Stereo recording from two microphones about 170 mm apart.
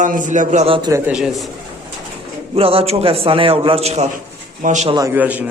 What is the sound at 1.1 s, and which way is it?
Speech, 5° right (ahead or behind).